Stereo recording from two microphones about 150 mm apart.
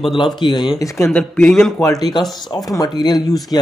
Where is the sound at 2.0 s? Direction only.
Centre (ahead or behind).